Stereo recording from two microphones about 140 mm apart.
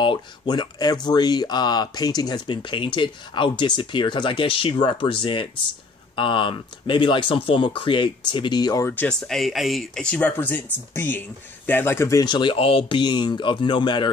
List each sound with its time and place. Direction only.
0.0 s speech: 35° left (ahead or behind)
8.8 s speech: 10° left (ahead or behind)
12.3 s speech: 35° left (ahead or behind)